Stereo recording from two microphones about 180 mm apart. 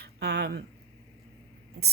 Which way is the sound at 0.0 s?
65° right (ahead or behind).